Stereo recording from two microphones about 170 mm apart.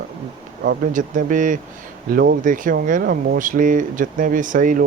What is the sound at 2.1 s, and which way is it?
Speech, 60° right (ahead or behind).